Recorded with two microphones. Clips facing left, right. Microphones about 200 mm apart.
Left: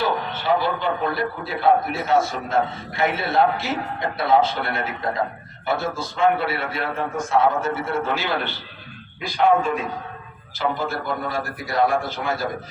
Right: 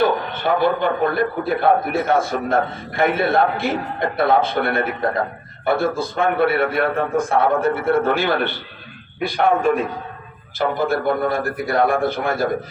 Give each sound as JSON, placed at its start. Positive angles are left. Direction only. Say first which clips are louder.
{"t": 0.0, "sound": "a man's voice", "louder": "right 5 dB", "side_deg": -55}
{"t": 10.6, "sound": "a man's voice", "louder": "right 5 dB", "side_deg": -55}